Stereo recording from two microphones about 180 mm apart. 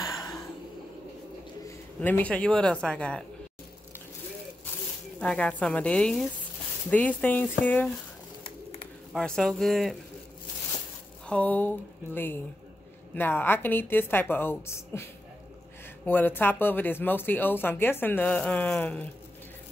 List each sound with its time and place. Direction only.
1.7 s a man's voice: 10° left (ahead or behind)
5.2 s speech: 5° left (ahead or behind)
9.1 s speech: 5° left (ahead or behind)
11.2 s speech: 10° left (ahead or behind)
16.1 s speech: 10° left (ahead or behind)